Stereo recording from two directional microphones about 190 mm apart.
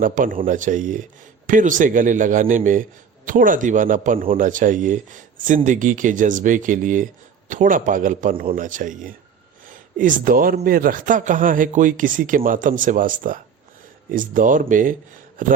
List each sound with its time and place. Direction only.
0.0 s speech: 45° right (ahead or behind)